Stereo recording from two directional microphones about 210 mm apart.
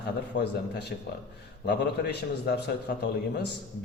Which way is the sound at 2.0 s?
50° left (ahead or behind).